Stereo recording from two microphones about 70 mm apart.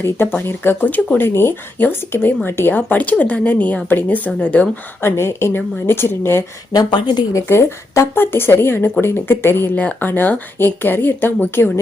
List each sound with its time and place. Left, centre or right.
0.0 s a woman's voice: left
1.3 s speech: left
4.9 s a woman's voice: left
6.7 s a woman's voice: left
7.3 s a woman's voice: left
9.7 s speech: left